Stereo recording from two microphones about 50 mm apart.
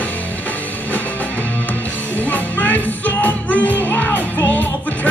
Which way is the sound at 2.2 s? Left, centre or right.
Left.